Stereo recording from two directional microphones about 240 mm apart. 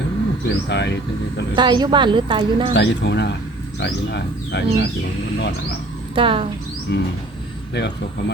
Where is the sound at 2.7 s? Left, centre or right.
Left.